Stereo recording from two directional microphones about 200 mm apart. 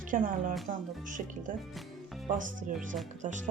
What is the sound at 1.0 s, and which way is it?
Speech, 40° right (ahead or behind).